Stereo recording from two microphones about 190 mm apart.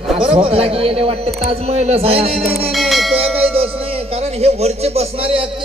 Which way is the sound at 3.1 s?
30° right (ahead or behind).